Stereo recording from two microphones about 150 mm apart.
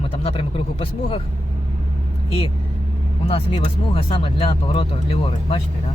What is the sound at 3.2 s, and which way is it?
Speech, 40° left (ahead or behind).